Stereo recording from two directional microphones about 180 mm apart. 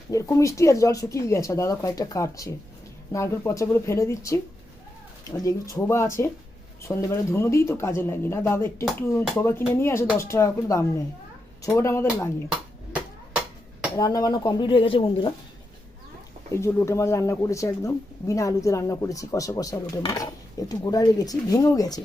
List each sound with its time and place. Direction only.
0.1 s speech: 20° left (ahead or behind)
5.4 s speech: 20° left (ahead or behind)
12.5 s a sound: 5° right (ahead or behind)
13.9 s speech: 20° left (ahead or behind)
16.6 s speech: 15° left (ahead or behind)